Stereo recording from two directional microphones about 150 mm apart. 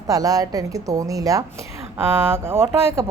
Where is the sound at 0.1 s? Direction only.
25° right (ahead or behind).